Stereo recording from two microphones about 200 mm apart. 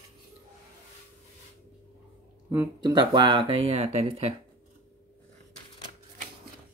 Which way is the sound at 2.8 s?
20° right (ahead or behind).